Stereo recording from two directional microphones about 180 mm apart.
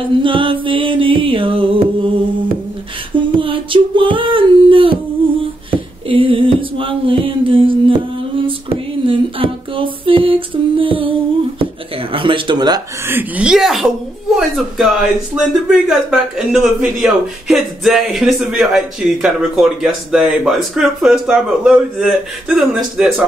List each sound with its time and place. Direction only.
0.2 s music: 30° right (ahead or behind)
3.2 s female singing: 30° right (ahead or behind)
5.7 s a sound: 30° right (ahead or behind)
12.1 s a woman's voice: 30° right (ahead or behind); by 23.2 s centre (ahead or behind)